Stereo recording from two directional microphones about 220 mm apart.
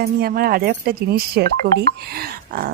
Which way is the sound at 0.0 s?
45° right (ahead or behind).